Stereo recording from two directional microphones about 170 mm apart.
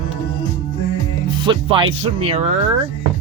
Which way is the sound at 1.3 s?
30° right (ahead or behind).